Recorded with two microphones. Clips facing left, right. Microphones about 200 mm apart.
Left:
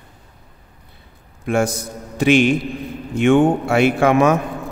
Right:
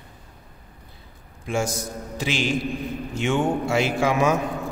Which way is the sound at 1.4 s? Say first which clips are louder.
Left 6 dB; 60° left (ahead or behind).